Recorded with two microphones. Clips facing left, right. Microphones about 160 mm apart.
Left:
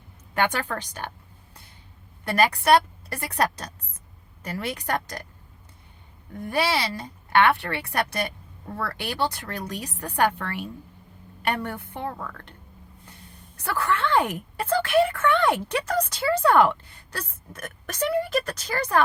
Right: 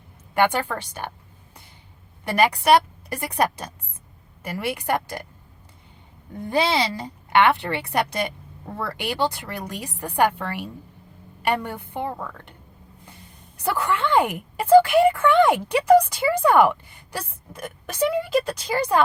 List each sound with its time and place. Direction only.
2.2 s a woman's voice: 15° right (ahead or behind)
6.4 s a woman's voice: 20° right (ahead or behind)
13.6 s a woman's voice: 15° right (ahead or behind)